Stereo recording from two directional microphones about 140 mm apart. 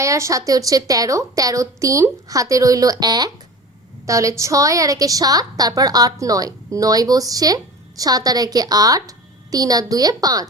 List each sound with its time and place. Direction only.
0.0 s a woman's voice: 20° right (ahead or behind)